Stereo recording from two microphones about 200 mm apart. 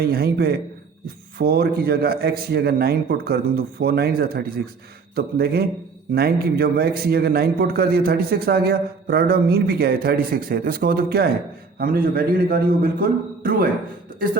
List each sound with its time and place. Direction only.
0.0 s a man's voice: 50° right (ahead or behind)